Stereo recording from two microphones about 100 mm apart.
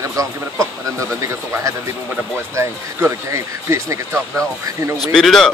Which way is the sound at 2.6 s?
30° right (ahead or behind).